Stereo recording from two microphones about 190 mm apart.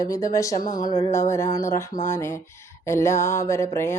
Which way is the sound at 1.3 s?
15° left (ahead or behind).